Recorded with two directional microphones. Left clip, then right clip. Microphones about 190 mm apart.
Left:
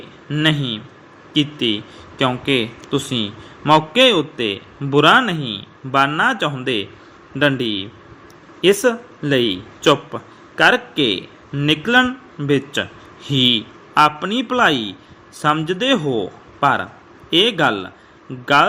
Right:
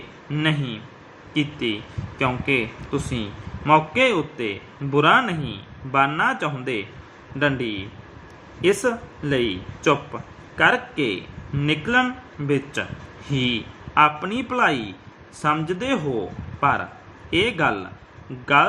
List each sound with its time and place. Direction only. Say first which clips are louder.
0.3 s a man's voice: left 6 dB; 30° left (ahead or behind)
5.4 s speech: left 7 dB; centre (ahead or behind)
5.9 s a man's voice: left 4 dB; 30° left (ahead or behind)